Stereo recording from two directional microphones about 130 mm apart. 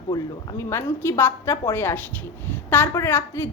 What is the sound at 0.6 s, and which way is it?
A woman's voice, 20° left (ahead or behind).